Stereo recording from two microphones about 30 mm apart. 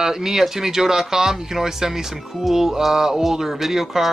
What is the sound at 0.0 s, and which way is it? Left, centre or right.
Music, centre.